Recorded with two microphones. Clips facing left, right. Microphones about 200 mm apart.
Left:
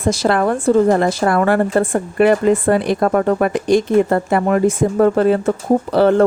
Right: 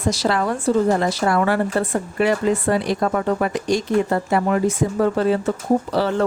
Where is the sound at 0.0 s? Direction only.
50° left (ahead or behind).